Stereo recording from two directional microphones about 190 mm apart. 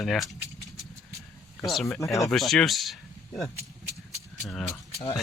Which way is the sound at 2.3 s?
Centre (ahead or behind).